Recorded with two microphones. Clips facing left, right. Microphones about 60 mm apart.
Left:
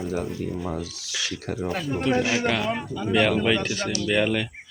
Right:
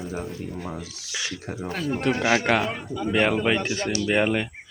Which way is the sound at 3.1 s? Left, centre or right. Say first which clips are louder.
Left 1 dB; right.